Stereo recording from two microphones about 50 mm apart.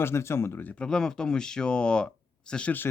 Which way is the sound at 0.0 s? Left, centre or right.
Left.